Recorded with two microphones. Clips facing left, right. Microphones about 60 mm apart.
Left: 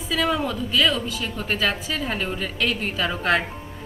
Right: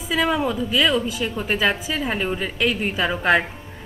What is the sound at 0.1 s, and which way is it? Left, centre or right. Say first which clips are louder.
A woman's voice: right 2 dB; centre.